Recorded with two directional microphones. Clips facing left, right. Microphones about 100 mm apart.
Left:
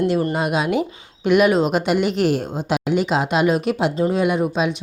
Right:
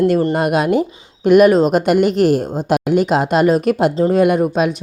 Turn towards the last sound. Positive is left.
turn(degrees=-55)  # may be behind; listen again after turning